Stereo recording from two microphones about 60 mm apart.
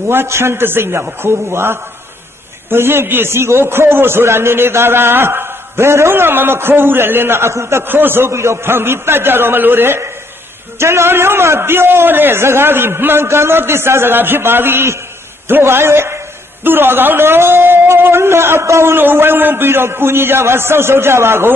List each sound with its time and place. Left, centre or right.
0.1 s a man's voice: right
18.9 s a man's voice: right